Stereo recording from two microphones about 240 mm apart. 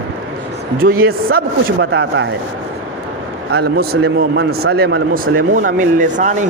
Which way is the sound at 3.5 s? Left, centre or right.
Right.